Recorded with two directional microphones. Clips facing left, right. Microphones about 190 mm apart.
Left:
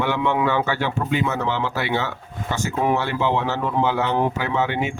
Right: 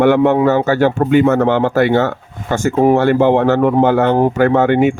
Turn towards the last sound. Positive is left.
turn(degrees=-55)  # may be behind; listen again after turning